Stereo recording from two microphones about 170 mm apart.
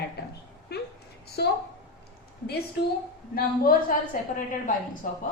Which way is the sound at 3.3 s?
60° left (ahead or behind).